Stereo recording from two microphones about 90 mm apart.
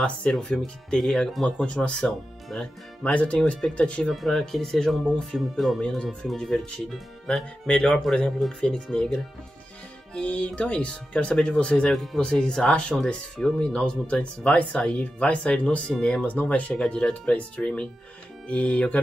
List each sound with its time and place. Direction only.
0.0 s speech: 10° left (ahead or behind)
4.1 s speech: centre (ahead or behind)